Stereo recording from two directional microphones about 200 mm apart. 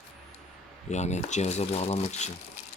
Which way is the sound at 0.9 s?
35° left (ahead or behind).